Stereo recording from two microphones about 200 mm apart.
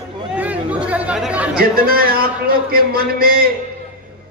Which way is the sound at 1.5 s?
45° right (ahead or behind).